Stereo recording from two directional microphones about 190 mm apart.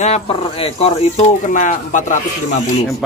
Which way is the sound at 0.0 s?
35° left (ahead or behind).